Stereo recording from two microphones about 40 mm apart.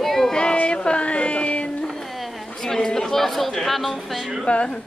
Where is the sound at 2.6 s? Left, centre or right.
Centre.